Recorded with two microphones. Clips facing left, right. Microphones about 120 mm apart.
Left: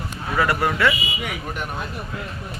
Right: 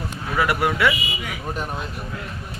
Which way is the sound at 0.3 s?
10° right (ahead or behind).